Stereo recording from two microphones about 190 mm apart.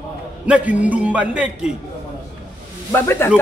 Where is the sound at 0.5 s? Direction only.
5° right (ahead or behind).